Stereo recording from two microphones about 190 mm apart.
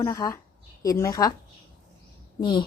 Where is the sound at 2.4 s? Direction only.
25° left (ahead or behind).